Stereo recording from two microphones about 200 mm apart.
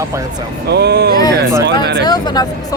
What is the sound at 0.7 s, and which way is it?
Speech, 55° right (ahead or behind).